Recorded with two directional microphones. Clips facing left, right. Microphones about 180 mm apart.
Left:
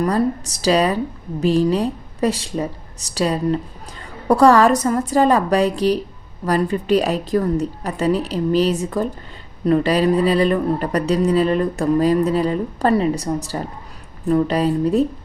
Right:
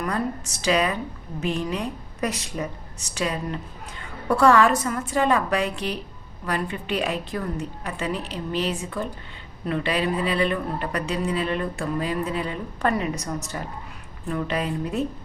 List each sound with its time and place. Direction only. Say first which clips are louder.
0.0 s speech: left 8 dB; 35° left (ahead or behind)